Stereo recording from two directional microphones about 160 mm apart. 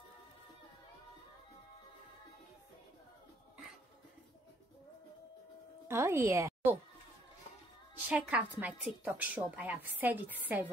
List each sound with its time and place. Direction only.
5.9 s music: 15° right (ahead or behind)
8.1 s a woman's voice: 10° right (ahead or behind)